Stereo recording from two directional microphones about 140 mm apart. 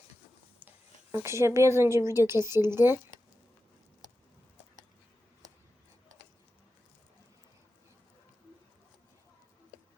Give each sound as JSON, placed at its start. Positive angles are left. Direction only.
{"t": 1.1, "sound": "a woman's voice", "side_deg": -20}